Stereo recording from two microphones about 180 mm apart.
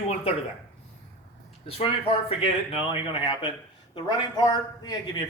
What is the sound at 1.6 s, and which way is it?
Speech, 30° left (ahead or behind).